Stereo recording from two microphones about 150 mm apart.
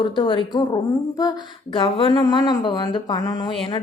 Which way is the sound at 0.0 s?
30° left (ahead or behind).